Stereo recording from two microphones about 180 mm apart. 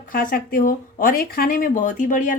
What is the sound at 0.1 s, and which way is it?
A woman's voice, 50° left (ahead or behind).